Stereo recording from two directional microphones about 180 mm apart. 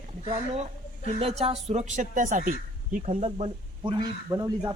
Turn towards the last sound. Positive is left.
turn(degrees=-20)  # may be behind; listen again after turning